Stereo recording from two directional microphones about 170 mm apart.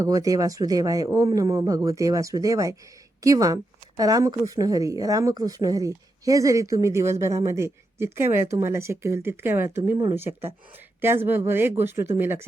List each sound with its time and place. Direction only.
0.0 s a woman's voice: 20° right (ahead or behind)